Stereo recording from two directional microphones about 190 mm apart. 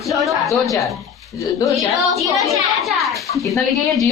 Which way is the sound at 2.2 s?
15° right (ahead or behind).